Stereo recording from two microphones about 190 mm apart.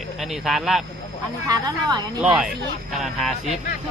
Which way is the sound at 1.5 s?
20° right (ahead or behind).